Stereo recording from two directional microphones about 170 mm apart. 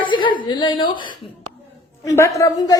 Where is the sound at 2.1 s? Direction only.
15° left (ahead or behind).